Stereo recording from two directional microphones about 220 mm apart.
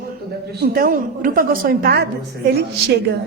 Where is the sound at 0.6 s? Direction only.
40° right (ahead or behind).